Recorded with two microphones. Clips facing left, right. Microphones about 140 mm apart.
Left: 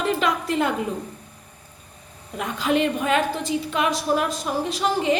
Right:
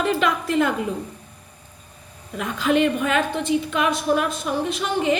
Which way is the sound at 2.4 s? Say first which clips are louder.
Right 2 dB; 35° left (ahead or behind).